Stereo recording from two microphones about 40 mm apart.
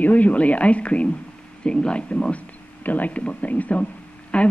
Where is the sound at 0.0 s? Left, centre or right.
Left.